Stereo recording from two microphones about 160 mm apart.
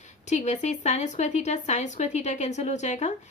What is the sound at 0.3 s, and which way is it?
A woman's voice, 45° left (ahead or behind).